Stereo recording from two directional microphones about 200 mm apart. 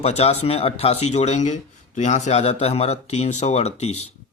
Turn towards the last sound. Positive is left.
turn(degrees=30)  # may be behind; listen again after turning